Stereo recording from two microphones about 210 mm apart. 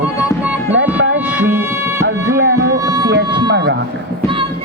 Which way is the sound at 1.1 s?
5° right (ahead or behind).